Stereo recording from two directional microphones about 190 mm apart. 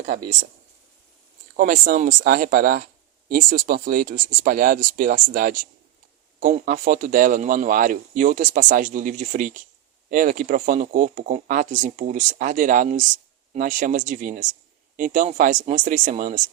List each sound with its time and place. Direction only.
1.5 s speech: 45° right (ahead or behind)